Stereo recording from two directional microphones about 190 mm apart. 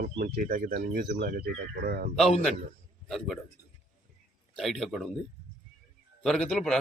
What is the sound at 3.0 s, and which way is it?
Speech, centre (ahead or behind).